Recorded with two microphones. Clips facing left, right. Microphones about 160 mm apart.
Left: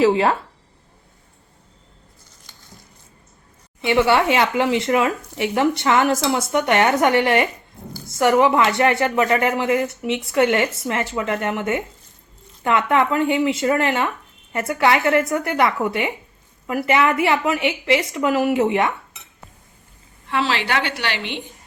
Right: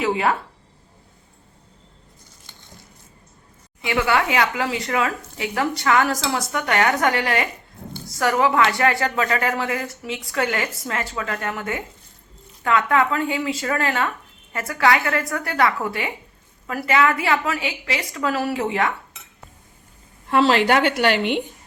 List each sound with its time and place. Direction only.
0.0 s speech: 30° left (ahead or behind)
3.8 s speech: 25° left (ahead or behind)
20.2 s a woman's voice: 45° right (ahead or behind)